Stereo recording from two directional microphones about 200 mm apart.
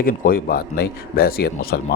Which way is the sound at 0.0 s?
45° left (ahead or behind).